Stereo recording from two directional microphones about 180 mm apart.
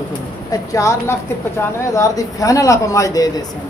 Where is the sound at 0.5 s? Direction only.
20° left (ahead or behind).